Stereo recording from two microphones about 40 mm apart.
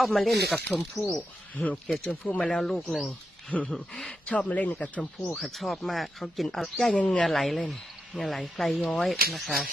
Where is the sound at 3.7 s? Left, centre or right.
Centre.